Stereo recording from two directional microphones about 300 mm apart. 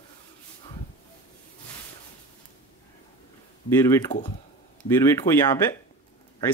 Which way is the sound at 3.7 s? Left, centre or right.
Centre.